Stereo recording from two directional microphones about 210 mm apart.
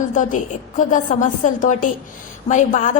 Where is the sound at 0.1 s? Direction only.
35° left (ahead or behind).